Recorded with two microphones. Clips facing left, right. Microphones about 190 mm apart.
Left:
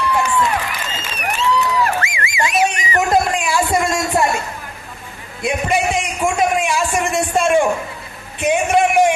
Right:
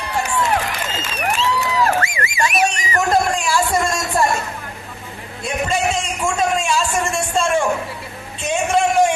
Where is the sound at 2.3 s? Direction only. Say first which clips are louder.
Left 2 dB; 20° left (ahead or behind).